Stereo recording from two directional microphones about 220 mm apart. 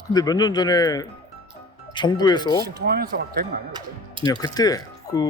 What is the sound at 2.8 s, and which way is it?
Speech, 45° right (ahead or behind).